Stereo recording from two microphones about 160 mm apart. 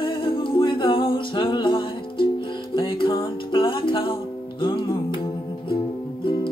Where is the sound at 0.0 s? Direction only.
35° left (ahead or behind).